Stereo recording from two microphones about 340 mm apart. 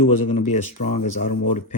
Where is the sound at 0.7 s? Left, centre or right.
Centre.